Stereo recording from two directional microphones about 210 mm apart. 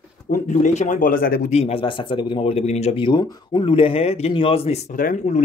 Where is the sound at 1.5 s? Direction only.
30° left (ahead or behind).